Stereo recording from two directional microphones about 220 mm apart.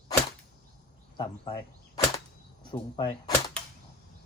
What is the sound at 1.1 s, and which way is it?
Speech, 20° left (ahead or behind).